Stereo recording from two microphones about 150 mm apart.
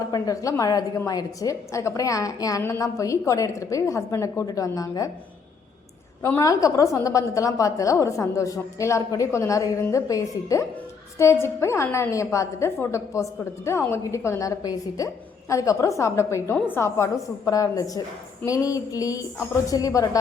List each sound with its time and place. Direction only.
0.1 s a woman's voice: 20° left (ahead or behind)
6.2 s a woman's voice: 20° left (ahead or behind)